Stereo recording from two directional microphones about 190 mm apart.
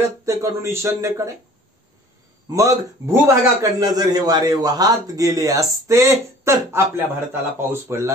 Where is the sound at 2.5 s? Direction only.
15° right (ahead or behind).